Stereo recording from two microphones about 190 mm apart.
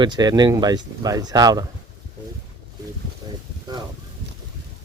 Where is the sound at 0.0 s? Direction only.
20° right (ahead or behind).